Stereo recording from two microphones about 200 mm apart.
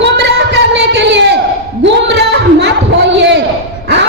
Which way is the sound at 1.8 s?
55° right (ahead or behind).